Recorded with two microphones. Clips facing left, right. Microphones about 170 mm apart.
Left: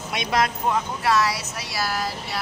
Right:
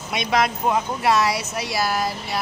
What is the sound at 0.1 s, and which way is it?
Speech, centre (ahead or behind).